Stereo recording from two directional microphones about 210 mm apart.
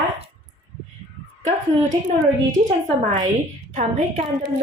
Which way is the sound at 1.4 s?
35° right (ahead or behind).